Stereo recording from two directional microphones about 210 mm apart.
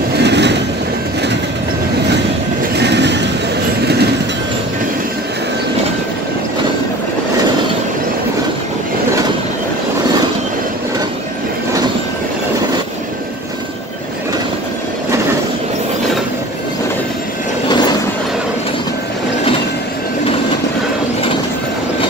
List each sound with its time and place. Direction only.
0.2 s vehicle: 55° right (ahead or behind)
2.7 s vehicle: 55° right (ahead or behind)
3.8 s train: 50° right (ahead or behind)
17.6 s vehicle: 20° left (ahead or behind)